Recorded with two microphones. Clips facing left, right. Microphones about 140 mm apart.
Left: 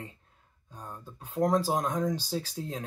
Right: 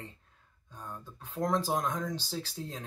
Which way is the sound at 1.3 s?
15° left (ahead or behind).